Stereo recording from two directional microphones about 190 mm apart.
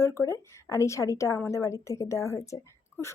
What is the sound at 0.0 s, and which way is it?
Speech, 15° left (ahead or behind).